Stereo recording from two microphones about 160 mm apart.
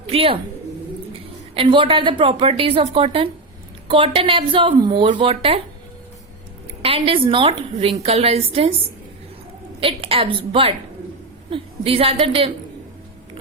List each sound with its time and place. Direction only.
0.1 s speech: 35° right (ahead or behind)
1.5 s a woman's voice: 35° right (ahead or behind)
6.8 s a woman's voice: 35° right (ahead or behind)
9.8 s a woman's voice: 35° right (ahead or behind)